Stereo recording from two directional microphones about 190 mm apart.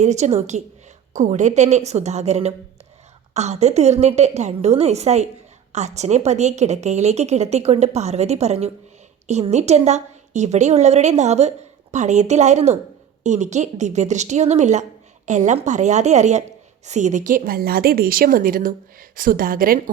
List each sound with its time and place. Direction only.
0.0 s a woman's voice: 35° right (ahead or behind)